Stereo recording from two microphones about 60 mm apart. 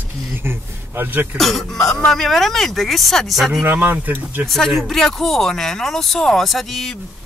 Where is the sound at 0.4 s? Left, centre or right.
Right.